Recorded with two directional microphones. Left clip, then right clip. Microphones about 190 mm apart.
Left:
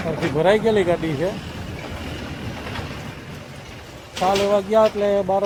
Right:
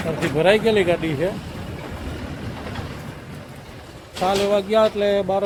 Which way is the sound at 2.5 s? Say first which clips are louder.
Left 3 dB; 50° left (ahead or behind).